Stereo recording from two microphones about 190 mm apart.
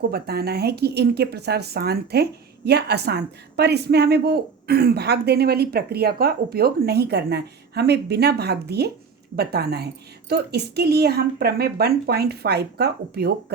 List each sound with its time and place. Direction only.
0.1 s a woman's voice: 55° right (ahead or behind)